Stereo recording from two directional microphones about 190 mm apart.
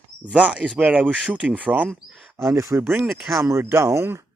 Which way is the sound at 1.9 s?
Centre (ahead or behind).